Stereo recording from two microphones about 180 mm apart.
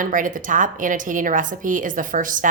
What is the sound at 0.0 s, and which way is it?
A woman's voice, 45° right (ahead or behind).